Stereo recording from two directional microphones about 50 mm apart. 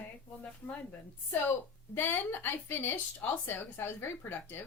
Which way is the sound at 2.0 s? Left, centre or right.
Left.